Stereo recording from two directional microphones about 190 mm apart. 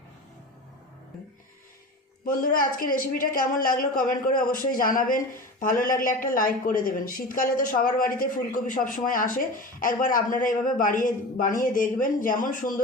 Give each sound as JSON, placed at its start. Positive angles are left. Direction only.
{"t": 2.2, "sound": "a woman's voice", "side_deg": 45}